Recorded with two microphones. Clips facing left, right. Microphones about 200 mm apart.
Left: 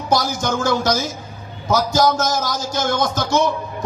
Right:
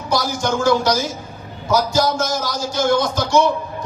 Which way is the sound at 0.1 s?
45° left (ahead or behind).